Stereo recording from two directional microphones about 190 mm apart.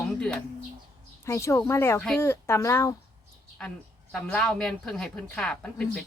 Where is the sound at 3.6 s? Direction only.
5° left (ahead or behind).